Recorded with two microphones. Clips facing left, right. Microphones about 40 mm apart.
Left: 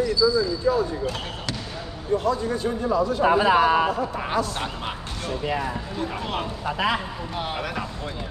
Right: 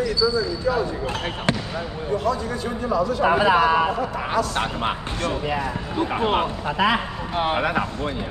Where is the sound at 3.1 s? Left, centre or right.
Right.